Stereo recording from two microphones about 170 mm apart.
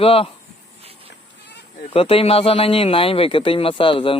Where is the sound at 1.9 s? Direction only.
35° left (ahead or behind).